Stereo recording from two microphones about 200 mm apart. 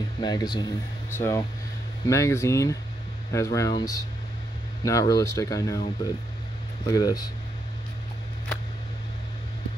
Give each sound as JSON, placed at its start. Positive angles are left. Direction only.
{"t": 0.2, "sound": "speech", "side_deg": 20}
{"t": 6.9, "sound": "speech", "side_deg": 20}